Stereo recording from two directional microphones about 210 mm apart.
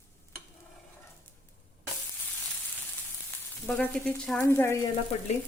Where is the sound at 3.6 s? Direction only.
5° left (ahead or behind).